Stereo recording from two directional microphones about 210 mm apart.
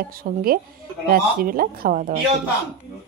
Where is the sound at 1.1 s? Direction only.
45° right (ahead or behind).